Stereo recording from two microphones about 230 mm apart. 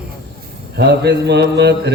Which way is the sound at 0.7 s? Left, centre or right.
Right.